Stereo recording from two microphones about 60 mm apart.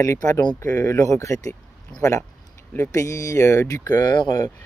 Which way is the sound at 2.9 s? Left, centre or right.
Left.